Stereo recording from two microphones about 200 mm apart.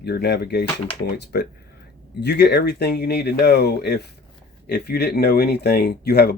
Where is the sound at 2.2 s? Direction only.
55° left (ahead or behind).